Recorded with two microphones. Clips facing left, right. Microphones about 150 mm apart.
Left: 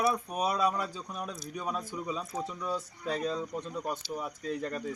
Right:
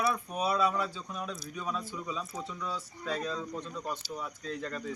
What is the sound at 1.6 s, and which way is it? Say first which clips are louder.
Speech: left 2 dB; 45° left (ahead or behind).